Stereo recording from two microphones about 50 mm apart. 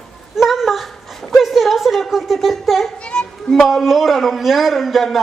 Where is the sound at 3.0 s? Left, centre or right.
Centre.